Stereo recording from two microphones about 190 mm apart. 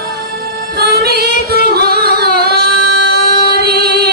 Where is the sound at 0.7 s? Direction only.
55° right (ahead or behind).